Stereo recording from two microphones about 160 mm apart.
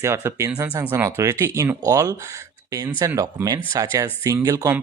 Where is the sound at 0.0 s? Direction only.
15° right (ahead or behind).